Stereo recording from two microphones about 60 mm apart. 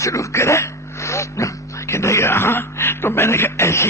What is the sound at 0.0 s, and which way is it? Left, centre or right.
Speech, left.